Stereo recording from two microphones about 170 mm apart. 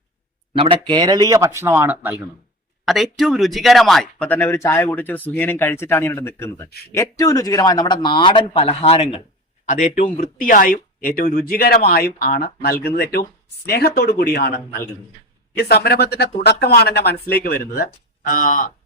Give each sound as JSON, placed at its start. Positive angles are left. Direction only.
{"t": 0.5, "sound": "speech", "side_deg": -35}
{"t": 2.8, "sound": "a man's voice", "side_deg": 0}